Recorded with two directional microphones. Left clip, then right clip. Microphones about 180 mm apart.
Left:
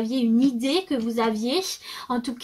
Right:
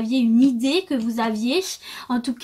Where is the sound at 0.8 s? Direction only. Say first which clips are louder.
Even; 35° right (ahead or behind).